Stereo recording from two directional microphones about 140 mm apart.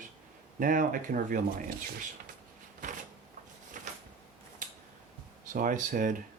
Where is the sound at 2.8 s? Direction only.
65° right (ahead or behind).